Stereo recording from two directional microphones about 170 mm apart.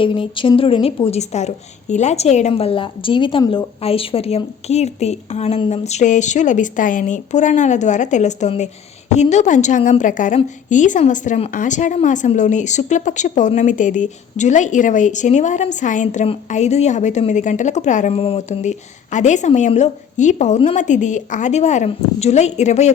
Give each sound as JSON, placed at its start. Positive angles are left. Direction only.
{"t": 0.0, "sound": "a woman's voice", "side_deg": 30}